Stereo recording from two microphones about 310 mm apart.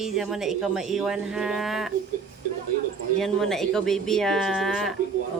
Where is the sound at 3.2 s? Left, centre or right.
Centre.